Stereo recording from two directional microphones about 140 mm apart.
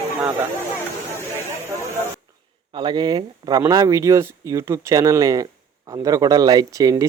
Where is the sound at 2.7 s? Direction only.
35° right (ahead or behind).